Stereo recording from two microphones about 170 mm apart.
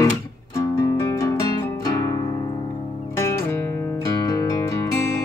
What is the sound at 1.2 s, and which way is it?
Music, 20° left (ahead or behind).